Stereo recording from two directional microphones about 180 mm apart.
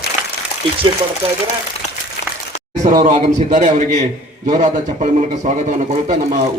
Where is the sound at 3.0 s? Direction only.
45° right (ahead or behind).